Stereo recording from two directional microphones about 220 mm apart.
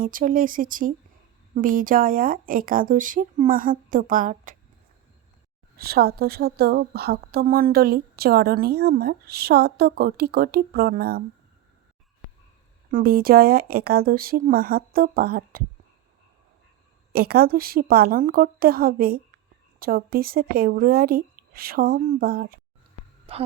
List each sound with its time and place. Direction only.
0.0 s speech: 40° right (ahead or behind)
5.7 s a woman's voice: 45° right (ahead or behind)
12.9 s a woman's voice: 40° right (ahead or behind)
17.1 s a woman's voice: 45° right (ahead or behind)
23.3 s a woman's voice: 25° right (ahead or behind)